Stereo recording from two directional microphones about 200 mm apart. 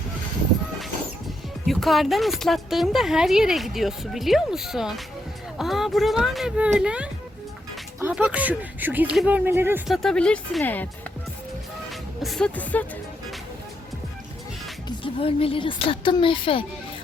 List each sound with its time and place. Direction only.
1.6 s a woman's voice: centre (ahead or behind)
11.9 s music: centre (ahead or behind)
14.8 s speech: 25° left (ahead or behind)